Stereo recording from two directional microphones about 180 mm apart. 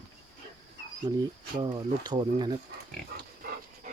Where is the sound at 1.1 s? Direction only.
25° right (ahead or behind).